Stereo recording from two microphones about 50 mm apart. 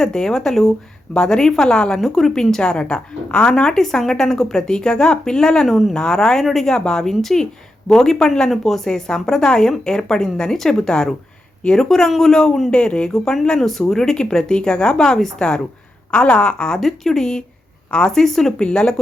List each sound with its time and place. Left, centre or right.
0.0 s a woman's voice: centre
2.0 s a woman's voice: centre
5.6 s a woman's voice: centre
5.9 s a woman's voice: centre
13.6 s a woman's voice: centre
16.8 s a woman's voice: centre